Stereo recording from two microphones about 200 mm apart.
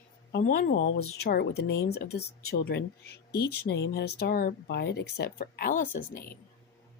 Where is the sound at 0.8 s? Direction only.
60° left (ahead or behind).